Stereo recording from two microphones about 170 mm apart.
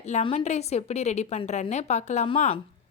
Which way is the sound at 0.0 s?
40° left (ahead or behind).